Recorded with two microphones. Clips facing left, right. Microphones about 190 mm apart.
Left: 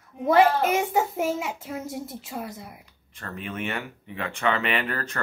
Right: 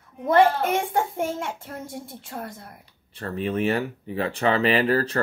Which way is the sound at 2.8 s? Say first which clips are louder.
Right 7 dB; 35° right (ahead or behind).